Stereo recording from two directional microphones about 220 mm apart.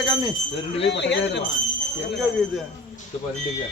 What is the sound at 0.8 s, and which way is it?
Speech, 50° left (ahead or behind).